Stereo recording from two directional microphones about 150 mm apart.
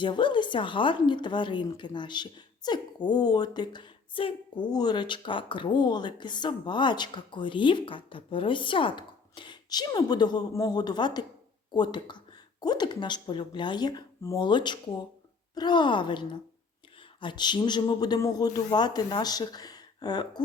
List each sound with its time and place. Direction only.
0.0 s a man's voice: 30° left (ahead or behind)